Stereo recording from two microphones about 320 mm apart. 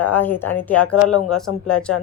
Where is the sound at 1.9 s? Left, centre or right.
Left.